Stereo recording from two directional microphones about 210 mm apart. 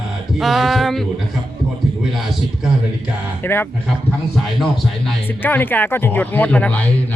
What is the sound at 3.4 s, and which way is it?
Speech, 10° left (ahead or behind).